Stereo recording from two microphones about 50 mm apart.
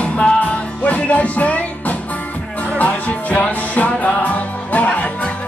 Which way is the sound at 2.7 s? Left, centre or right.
Left.